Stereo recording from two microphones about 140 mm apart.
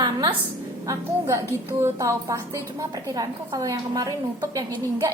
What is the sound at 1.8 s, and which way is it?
A woman's voice, 20° right (ahead or behind).